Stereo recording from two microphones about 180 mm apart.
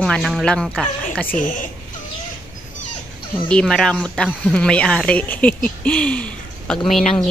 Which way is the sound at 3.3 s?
5° left (ahead or behind).